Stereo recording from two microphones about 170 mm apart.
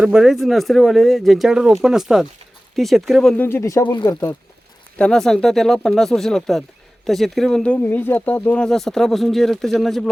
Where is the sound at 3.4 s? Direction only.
15° left (ahead or behind).